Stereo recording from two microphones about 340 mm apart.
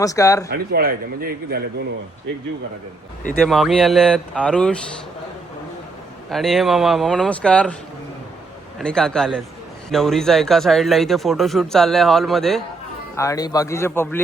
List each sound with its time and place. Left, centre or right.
0.0 s speech: centre
0.5 s a man's voice: right
3.4 s a man's voice: centre
6.3 s a man's voice: centre
8.8 s a man's voice: centre